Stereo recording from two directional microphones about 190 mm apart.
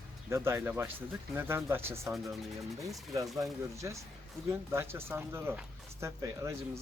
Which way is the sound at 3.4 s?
15° right (ahead or behind).